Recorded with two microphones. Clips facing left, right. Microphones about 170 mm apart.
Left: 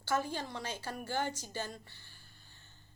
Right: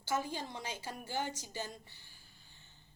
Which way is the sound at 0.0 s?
15° right (ahead or behind).